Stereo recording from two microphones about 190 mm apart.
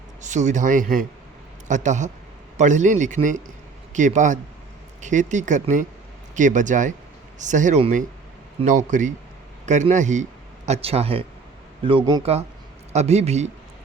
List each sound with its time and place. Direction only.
0.2 s a man's voice: 40° right (ahead or behind)